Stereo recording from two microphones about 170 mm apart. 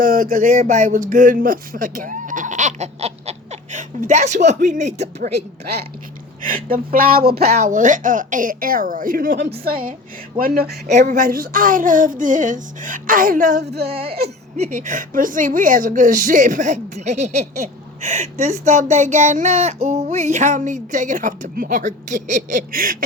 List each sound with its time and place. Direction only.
0.0 s a woman's voice: 50° right (ahead or behind)
6.4 s speech: 55° right (ahead or behind)
7.5 s a woman's voice: 45° right (ahead or behind)
10.8 s a woman's voice: 45° right (ahead or behind)
13.6 s speech: 75° right (ahead or behind)
13.8 s a woman's voice: 35° right (ahead or behind); by 23.0 s 55° right (ahead or behind)